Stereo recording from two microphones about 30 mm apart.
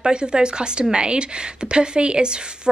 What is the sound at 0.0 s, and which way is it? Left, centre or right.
Speech, right.